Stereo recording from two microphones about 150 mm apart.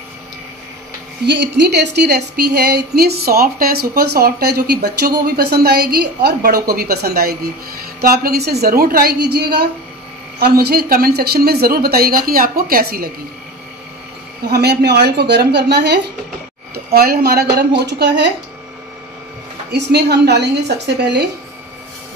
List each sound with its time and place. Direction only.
1.7 s a woman's voice: 90° right
14.5 s a woman's voice: 90° right
19.7 s a woman's voice: 90° right